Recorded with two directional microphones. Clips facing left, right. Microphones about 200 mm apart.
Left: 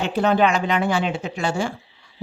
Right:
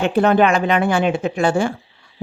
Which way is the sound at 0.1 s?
55° right (ahead or behind).